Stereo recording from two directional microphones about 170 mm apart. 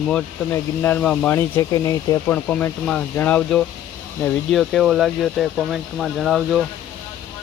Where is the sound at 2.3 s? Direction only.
5° left (ahead or behind).